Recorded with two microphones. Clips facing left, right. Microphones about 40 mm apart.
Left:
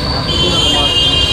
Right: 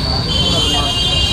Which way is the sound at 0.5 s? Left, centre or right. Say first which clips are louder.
Left 4 dB; left.